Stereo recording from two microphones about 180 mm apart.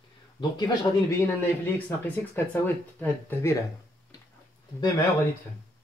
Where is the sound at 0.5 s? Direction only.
20° left (ahead or behind).